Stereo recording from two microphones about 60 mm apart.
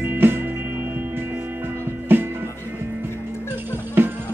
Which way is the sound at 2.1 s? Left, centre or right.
Right.